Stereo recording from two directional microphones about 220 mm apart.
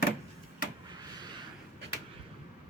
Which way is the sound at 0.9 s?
20° right (ahead or behind).